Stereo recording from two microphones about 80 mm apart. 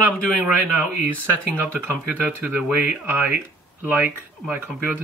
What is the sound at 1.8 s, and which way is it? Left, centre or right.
Speech, centre.